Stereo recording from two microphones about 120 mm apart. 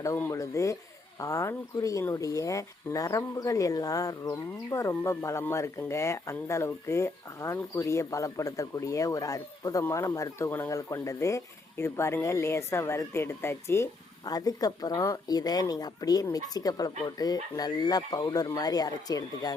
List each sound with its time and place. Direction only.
0.2 s speech: 25° left (ahead or behind)